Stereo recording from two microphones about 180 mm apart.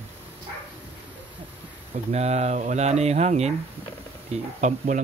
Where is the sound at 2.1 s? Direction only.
35° right (ahead or behind).